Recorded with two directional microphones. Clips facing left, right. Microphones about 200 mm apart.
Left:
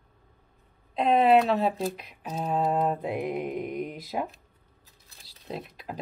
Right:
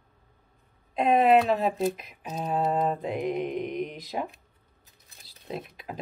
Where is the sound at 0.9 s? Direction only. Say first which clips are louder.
Even; centre (ahead or behind).